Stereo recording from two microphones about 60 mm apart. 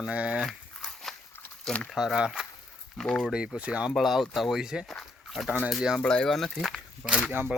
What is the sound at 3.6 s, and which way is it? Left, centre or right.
Speech, centre.